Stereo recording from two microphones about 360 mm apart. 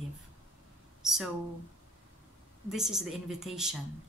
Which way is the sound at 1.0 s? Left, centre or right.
Centre.